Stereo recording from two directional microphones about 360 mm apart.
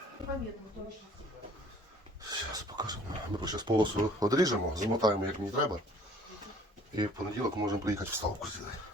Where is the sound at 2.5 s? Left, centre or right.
Centre.